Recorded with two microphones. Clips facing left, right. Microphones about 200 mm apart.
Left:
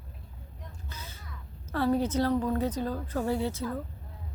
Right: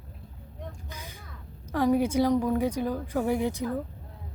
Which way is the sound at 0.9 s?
15° right (ahead or behind).